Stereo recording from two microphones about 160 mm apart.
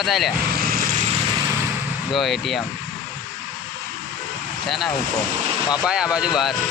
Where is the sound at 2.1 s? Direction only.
Centre (ahead or behind).